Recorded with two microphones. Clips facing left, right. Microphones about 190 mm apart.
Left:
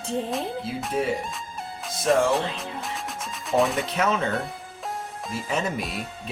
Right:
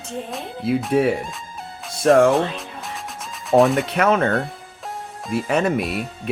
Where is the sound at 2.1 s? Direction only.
60° right (ahead or behind).